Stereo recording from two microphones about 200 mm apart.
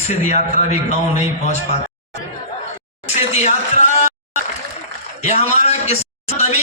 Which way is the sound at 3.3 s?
35° left (ahead or behind).